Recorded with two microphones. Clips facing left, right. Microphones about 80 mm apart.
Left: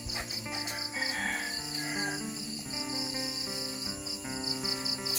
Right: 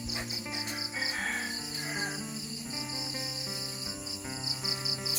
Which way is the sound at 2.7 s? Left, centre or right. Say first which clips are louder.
Left 5 dB; centre.